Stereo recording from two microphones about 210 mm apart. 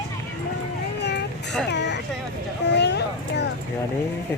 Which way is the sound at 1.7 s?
55° left (ahead or behind).